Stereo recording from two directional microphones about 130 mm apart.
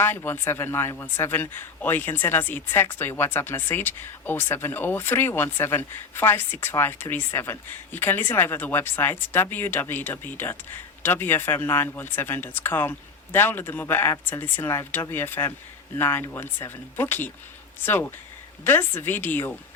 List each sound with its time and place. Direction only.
0.0 s a man's voice: 15° left (ahead or behind)